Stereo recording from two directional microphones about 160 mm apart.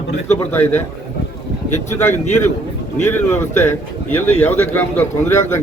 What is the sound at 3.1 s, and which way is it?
A man's voice, 15° left (ahead or behind).